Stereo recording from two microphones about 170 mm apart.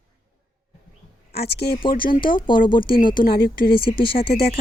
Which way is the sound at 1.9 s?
60° left (ahead or behind).